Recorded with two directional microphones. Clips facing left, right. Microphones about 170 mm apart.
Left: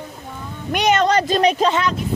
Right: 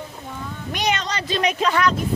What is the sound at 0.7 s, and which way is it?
Speech, 50° left (ahead or behind).